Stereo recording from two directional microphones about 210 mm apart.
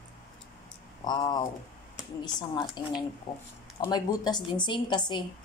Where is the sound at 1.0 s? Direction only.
20° left (ahead or behind).